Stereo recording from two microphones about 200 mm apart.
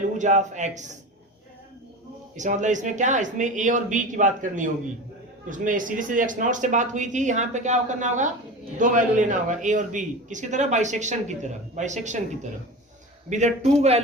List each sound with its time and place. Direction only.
0.0 s speech: 35° right (ahead or behind)
2.3 s speech: 40° right (ahead or behind)